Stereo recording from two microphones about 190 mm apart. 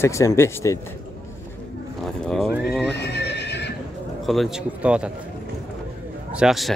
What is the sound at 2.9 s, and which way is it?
Horse, 60° left (ahead or behind).